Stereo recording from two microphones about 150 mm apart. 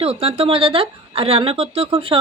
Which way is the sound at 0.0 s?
40° right (ahead or behind).